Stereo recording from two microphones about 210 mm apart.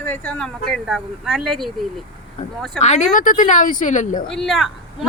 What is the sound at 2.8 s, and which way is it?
A woman's voice, 35° left (ahead or behind).